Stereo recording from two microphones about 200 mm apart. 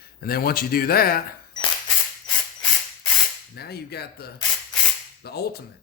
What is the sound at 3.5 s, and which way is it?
Speech, 50° left (ahead or behind).